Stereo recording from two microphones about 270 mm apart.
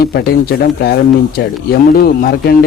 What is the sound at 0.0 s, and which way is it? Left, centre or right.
Speech, left.